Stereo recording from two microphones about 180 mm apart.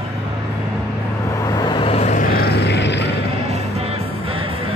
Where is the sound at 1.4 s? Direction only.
20° left (ahead or behind); by 3.1 s 75° left (ahead or behind).